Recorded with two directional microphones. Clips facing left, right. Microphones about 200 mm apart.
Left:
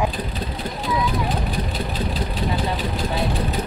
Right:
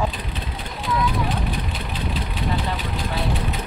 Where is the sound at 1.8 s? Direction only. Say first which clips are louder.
Left 3 dB; 40° left (ahead or behind).